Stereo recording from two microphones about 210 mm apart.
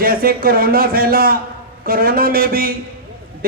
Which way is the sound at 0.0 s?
45° right (ahead or behind).